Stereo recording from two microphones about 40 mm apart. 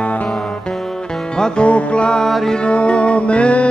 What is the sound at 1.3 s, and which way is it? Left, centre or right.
Music, left.